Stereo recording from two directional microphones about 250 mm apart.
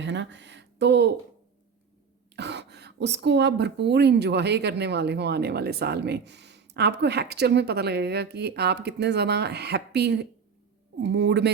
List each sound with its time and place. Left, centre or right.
0.0 s speech: right
2.3 s speech: right